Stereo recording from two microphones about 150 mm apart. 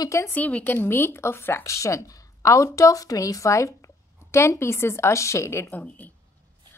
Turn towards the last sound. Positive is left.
turn(degrees=10)  # may be behind; listen again after turning